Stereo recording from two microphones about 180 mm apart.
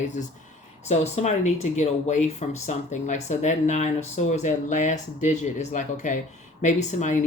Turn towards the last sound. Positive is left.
turn(degrees=45)  # may be behind; listen again after turning